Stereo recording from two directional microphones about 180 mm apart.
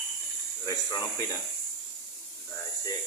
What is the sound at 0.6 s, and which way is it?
Speech, 20° left (ahead or behind).